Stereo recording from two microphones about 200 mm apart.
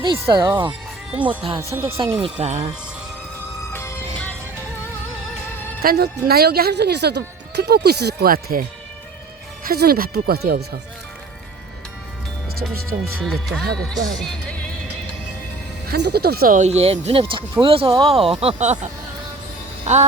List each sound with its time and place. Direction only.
0.0 s speech: 25° right (ahead or behind)
1.2 s speech: 25° right (ahead or behind)
1.5 s speech: 15° right (ahead or behind)
2.2 s speech: 35° right (ahead or behind)
3.7 s music: 10° left (ahead or behind)
5.8 s a woman's voice: 50° right (ahead or behind)
9.6 s a woman's voice: 50° right (ahead or behind)
12.7 s a woman's voice: 50° right (ahead or behind)
13.1 s speech: centre (ahead or behind)
14.1 s music: 5° left (ahead or behind)
15.9 s speech: 55° right (ahead or behind); by 18.9 s 35° right (ahead or behind)
19.9 s speech: 35° right (ahead or behind)